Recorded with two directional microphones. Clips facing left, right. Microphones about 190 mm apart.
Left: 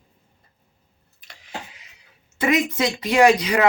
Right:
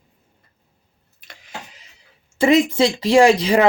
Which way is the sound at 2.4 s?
30° right (ahead or behind).